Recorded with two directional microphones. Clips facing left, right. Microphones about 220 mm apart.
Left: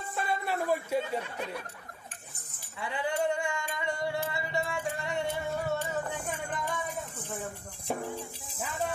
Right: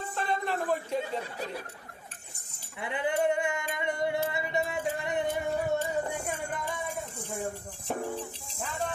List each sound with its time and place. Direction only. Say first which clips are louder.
0.1 s a sound: even; 10° left (ahead or behind)
2.8 s music: right 2 dB; 20° right (ahead or behind)
7.9 s music: even; 10° left (ahead or behind)